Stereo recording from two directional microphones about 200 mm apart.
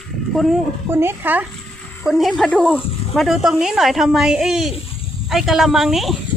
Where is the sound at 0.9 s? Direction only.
10° right (ahead or behind).